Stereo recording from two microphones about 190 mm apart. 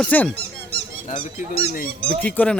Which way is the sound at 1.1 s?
30° left (ahead or behind).